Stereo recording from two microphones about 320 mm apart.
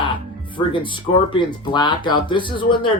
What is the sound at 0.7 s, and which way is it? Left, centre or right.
Speech, centre.